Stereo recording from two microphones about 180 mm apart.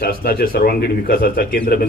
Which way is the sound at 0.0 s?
55° left (ahead or behind).